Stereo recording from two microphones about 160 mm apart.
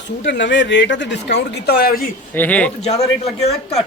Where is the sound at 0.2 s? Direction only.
90° left.